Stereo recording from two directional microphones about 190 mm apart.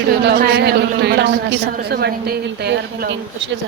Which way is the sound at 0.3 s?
55° right (ahead or behind).